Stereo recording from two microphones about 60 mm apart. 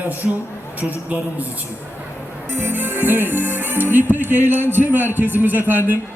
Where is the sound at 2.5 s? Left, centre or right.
Right.